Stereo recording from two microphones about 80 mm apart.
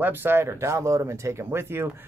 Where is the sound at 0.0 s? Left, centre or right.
Right.